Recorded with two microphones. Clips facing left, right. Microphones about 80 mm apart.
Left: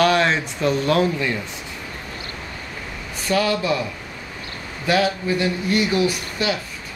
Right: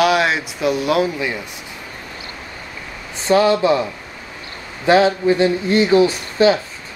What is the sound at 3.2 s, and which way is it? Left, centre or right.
Speech, right.